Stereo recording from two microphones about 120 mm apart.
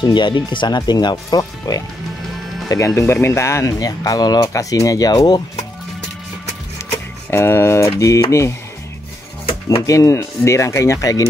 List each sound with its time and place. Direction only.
0.0 s speech: 40° left (ahead or behind)
7.2 s speech: 20° left (ahead or behind)
9.5 s a sound: 55° left (ahead or behind)
9.8 s speech: 25° left (ahead or behind)